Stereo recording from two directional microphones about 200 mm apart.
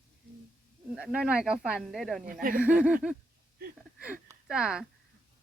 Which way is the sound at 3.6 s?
45° right (ahead or behind).